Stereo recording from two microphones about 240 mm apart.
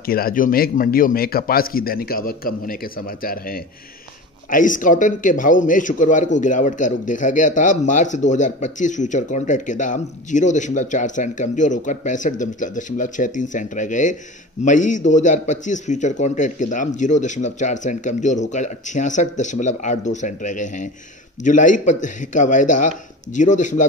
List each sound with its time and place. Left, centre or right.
0.0 s speech: left